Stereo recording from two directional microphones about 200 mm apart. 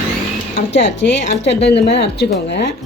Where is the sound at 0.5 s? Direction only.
60° left (ahead or behind).